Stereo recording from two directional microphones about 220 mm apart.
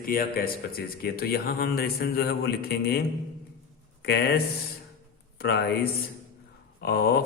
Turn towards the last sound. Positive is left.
turn(degrees=45)  # may be behind; listen again after turning